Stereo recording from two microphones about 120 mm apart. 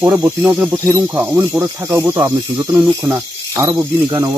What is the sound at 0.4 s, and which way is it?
Speech, 15° right (ahead or behind).